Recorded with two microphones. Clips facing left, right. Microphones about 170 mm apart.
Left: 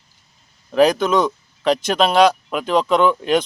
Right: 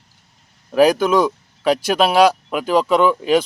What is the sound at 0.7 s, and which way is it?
Speech, 5° right (ahead or behind).